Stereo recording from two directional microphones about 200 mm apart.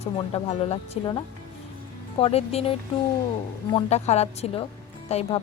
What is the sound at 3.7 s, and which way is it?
Speech, 35° left (ahead or behind).